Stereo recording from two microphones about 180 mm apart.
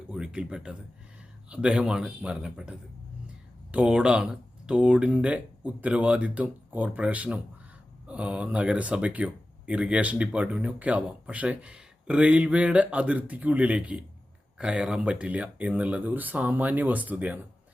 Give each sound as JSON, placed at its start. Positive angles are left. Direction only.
{"t": 0.1, "sound": "a man's voice", "side_deg": -5}